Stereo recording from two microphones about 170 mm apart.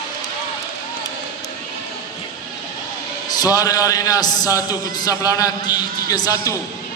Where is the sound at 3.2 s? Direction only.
20° left (ahead or behind).